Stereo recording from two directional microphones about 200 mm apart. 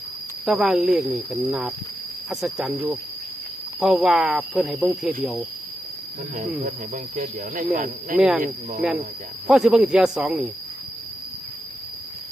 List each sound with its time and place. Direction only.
0.4 s speech: centre (ahead or behind)
6.3 s speech: 40° right (ahead or behind)
8.8 s speech: 5° right (ahead or behind)